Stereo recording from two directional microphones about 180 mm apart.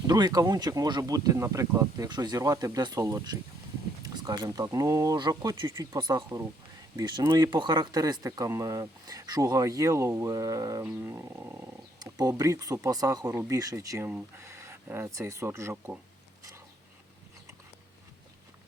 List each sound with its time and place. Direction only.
0.1 s speech: 20° right (ahead or behind)